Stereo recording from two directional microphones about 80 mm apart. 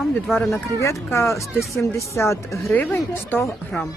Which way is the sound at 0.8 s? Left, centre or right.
Left.